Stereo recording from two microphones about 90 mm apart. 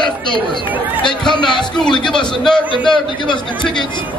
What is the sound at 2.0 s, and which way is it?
Speech, 5° left (ahead or behind).